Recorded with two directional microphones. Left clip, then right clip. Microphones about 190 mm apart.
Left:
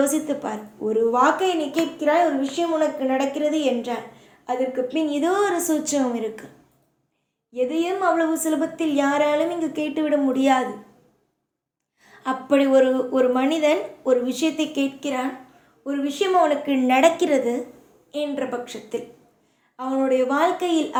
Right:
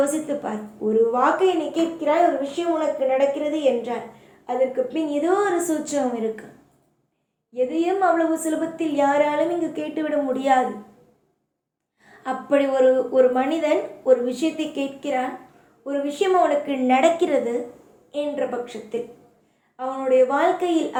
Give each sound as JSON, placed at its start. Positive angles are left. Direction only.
{"t": 0.0, "sound": "a woman's voice", "side_deg": 40}
{"t": 7.5, "sound": "a woman's voice", "side_deg": 35}
{"t": 12.2, "sound": "a woman's voice", "side_deg": 40}